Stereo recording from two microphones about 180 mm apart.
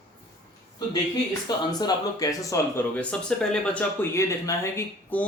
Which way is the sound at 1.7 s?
20° left (ahead or behind).